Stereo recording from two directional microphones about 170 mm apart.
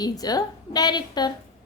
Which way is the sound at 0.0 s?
20° left (ahead or behind).